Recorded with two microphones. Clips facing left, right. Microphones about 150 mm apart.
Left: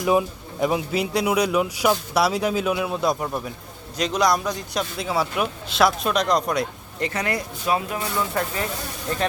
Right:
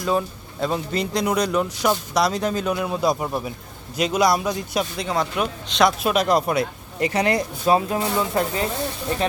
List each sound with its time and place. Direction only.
0.0 s a man's voice: 15° left (ahead or behind)
6.0 s a man's voice: 5° right (ahead or behind)
7.2 s speech: 30° right (ahead or behind)